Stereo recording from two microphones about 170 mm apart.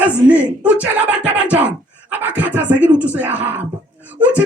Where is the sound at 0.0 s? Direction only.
10° right (ahead or behind).